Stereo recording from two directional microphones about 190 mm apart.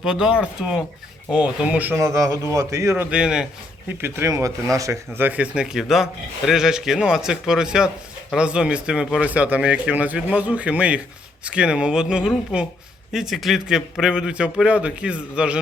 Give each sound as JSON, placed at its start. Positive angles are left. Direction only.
{"t": 0.0, "sound": "a man's voice", "side_deg": -5}